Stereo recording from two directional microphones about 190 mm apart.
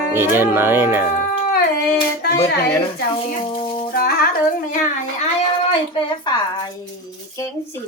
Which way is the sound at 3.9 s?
50° left (ahead or behind).